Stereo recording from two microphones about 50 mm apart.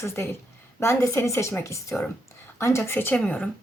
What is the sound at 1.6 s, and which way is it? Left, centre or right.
Speech, left.